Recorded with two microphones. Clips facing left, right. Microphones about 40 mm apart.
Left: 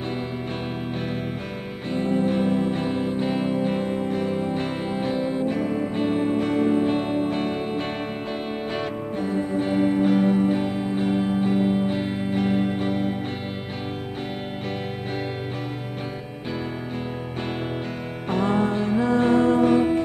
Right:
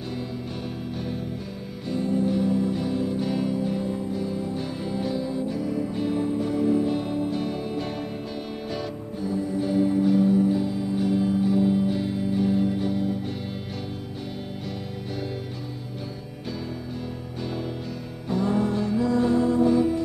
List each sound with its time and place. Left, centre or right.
1.9 s music: left
18.3 s music: left